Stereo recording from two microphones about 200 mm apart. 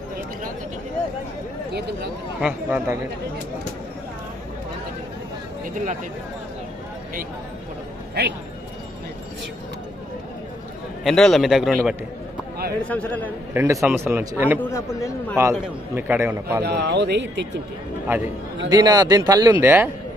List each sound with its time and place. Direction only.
2.4 s speech: 5° right (ahead or behind)
5.6 s speech: 40° right (ahead or behind)
8.2 s speech: 55° right (ahead or behind)
11.0 s a man's voice: centre (ahead or behind)
13.5 s speech: 15° right (ahead or behind)
14.6 s a man's voice: 15° left (ahead or behind)
16.0 s speech: 10° right (ahead or behind)
16.6 s speech: 55° right (ahead or behind)
18.7 s speech: 20° right (ahead or behind)